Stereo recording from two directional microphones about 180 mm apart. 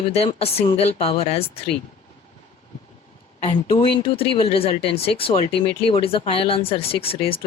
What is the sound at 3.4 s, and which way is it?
Speech, 30° left (ahead or behind).